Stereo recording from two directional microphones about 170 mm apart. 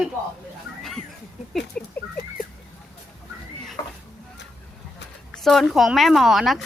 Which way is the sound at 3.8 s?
20° left (ahead or behind).